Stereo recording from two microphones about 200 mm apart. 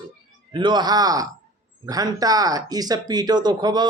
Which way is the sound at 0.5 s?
20° right (ahead or behind).